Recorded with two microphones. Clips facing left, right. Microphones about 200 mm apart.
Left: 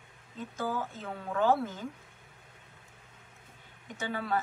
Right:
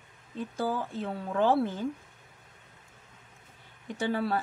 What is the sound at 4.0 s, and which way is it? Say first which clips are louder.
Speech: right 4 dB; 35° right (ahead or behind).